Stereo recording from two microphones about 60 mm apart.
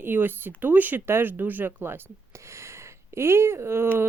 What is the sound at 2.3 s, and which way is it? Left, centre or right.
Speech, right.